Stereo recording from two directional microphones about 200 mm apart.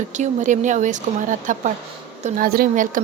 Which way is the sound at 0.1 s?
35° right (ahead or behind).